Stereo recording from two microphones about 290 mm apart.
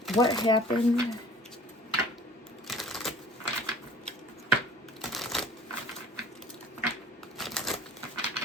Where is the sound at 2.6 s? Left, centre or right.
Centre.